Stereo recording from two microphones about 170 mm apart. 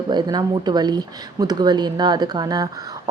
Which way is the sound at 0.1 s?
25° right (ahead or behind).